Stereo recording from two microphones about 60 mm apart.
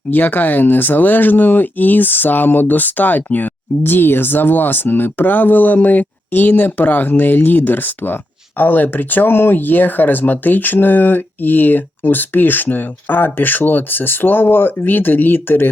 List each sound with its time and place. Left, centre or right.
0.1 s speech: left